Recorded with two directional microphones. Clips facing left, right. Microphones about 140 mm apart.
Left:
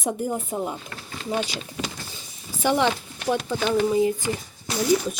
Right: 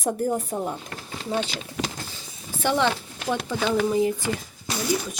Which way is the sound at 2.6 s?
15° left (ahead or behind).